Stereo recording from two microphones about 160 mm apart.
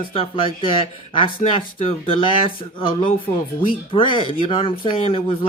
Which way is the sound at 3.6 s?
30° left (ahead or behind).